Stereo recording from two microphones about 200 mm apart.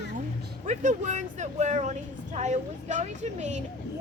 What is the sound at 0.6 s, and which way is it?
Speech, 35° right (ahead or behind).